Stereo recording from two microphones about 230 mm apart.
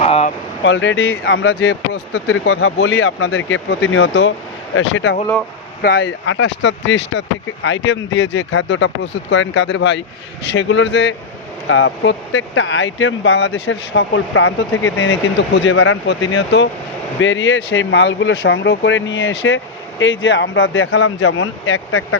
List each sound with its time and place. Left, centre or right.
0.0 s a sound: left
0.6 s speech: left
2.9 s speech: left
3.8 s speech: left
5.8 s speech: left
21.3 s speech: left